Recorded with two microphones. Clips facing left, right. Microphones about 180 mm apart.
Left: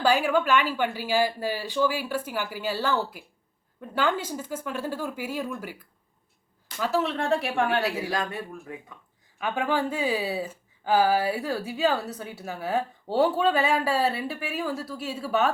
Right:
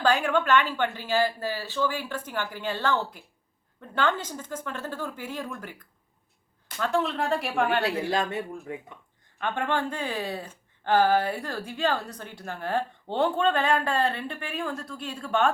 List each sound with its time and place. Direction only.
0.0 s a woman's voice: 10° left (ahead or behind)
8.1 s speech: 25° right (ahead or behind)
9.4 s a woman's voice: 5° left (ahead or behind)